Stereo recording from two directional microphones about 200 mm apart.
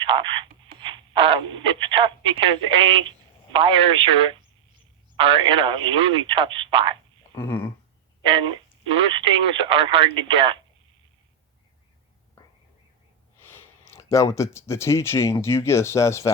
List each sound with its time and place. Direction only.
0.0 s speech: 25° right (ahead or behind)
7.3 s speech: 10° left (ahead or behind)
8.2 s speech: 25° right (ahead or behind)
13.4 s speech: 10° left (ahead or behind)